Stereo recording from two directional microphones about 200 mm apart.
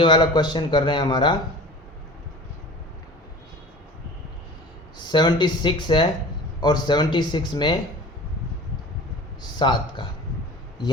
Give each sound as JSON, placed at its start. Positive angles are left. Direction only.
{"t": 0.0, "sound": "speech", "side_deg": 25}
{"t": 4.9, "sound": "speech", "side_deg": 20}
{"t": 9.4, "sound": "speech", "side_deg": 20}